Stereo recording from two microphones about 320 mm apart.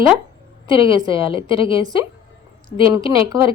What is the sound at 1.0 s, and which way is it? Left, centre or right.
Speech, centre.